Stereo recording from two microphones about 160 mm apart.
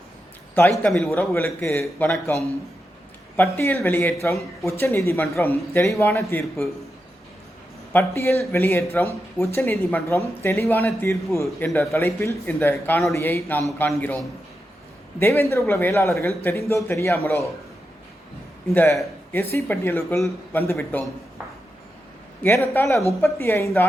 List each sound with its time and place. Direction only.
0.9 s a man's voice: centre (ahead or behind)
1.1 s speech: 15° left (ahead or behind)
1.8 s a man's voice: centre (ahead or behind)
3.3 s speech: 15° left (ahead or behind)
7.9 s speech: 15° left (ahead or behind)
15.2 s speech: 15° left (ahead or behind)
18.7 s speech: 15° left (ahead or behind)
22.4 s speech: 15° left (ahead or behind)